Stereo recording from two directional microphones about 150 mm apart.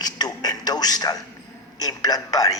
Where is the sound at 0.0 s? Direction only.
25° left (ahead or behind).